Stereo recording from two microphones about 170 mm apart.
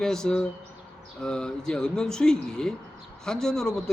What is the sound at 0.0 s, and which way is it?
A man's voice, 5° left (ahead or behind).